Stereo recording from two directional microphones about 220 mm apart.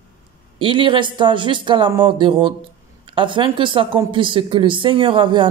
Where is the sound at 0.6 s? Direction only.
20° right (ahead or behind).